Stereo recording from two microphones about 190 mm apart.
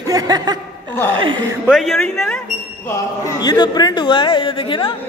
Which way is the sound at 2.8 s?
20° left (ahead or behind).